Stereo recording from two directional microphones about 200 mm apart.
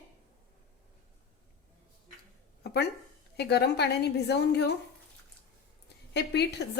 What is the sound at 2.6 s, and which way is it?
A woman's voice, 55° left (ahead or behind).